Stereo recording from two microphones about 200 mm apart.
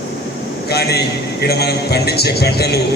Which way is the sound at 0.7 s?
55° left (ahead or behind).